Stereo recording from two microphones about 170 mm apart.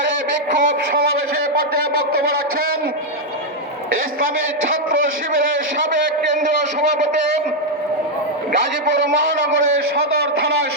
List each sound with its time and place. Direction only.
0.5 s speech: 50° right (ahead or behind)